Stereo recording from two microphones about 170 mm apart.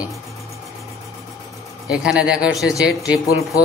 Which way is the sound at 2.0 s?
5° right (ahead or behind).